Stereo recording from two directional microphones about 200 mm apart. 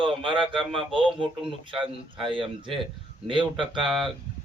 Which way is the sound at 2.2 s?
25° right (ahead or behind).